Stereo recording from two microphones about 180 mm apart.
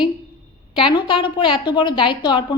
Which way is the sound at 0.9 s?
30° left (ahead or behind).